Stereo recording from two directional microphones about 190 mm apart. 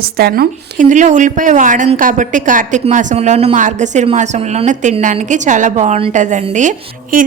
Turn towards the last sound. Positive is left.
turn(degrees=-45)  # may be behind; listen again after turning